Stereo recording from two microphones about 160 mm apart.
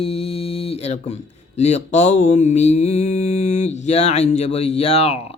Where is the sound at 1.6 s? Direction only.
45° left (ahead or behind).